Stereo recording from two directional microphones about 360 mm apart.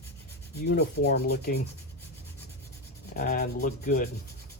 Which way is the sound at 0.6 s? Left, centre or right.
Left.